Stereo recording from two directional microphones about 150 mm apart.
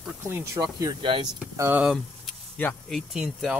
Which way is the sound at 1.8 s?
Centre (ahead or behind).